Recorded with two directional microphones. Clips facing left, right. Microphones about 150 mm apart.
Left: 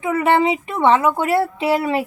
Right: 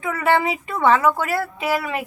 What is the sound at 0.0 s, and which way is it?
Speech, 20° left (ahead or behind).